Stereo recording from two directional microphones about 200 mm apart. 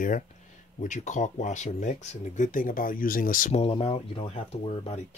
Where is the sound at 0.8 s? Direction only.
40° left (ahead or behind).